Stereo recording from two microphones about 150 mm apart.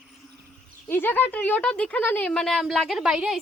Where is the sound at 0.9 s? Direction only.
15° left (ahead or behind); by 3.3 s 5° right (ahead or behind).